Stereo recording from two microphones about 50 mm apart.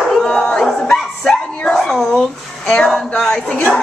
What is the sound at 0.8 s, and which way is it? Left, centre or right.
Bow-wow, centre.